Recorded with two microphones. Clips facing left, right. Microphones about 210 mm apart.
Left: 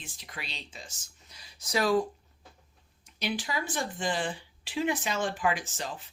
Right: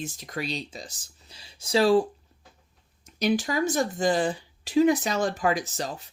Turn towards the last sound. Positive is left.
turn(degrees=-40)  # may be behind; listen again after turning